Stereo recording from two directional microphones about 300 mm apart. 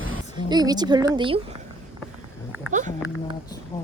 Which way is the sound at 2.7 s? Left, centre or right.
Right.